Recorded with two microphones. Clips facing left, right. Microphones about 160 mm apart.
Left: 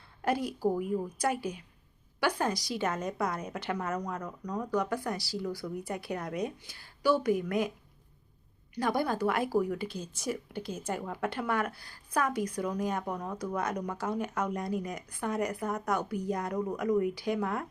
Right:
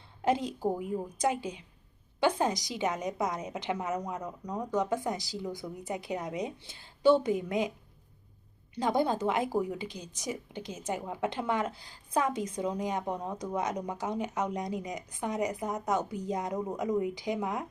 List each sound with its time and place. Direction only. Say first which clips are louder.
0.2 s a woman's voice: right 1 dB; 20° right (ahead or behind)
8.7 s a woman's voice: right 2 dB; 20° right (ahead or behind)